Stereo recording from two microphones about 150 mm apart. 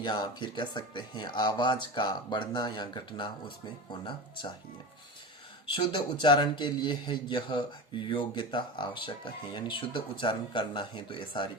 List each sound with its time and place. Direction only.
0.0 s speech: 30° left (ahead or behind)
5.6 s speech: 30° left (ahead or behind)